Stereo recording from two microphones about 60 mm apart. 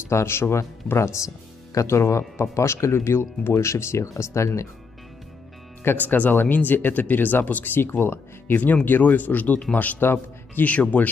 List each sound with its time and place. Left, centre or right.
0.1 s speech: left
5.9 s speech: left